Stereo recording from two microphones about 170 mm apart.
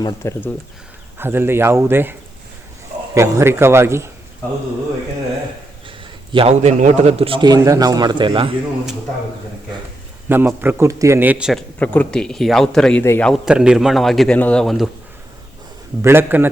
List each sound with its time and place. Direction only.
0.0 s speech: 15° left (ahead or behind)
1.2 s a man's voice: 15° right (ahead or behind)
3.2 s a man's voice: 15° right (ahead or behind)
6.3 s a man's voice: 35° right (ahead or behind)
10.2 s a man's voice: 10° right (ahead or behind)
11.8 s a man's voice: 5° left (ahead or behind)
16.0 s a man's voice: 15° right (ahead or behind)